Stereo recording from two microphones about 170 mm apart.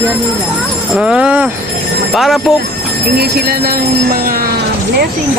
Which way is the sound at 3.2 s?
65° right (ahead or behind).